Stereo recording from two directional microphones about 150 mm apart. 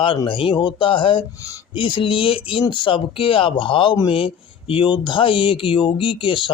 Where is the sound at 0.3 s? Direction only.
35° left (ahead or behind).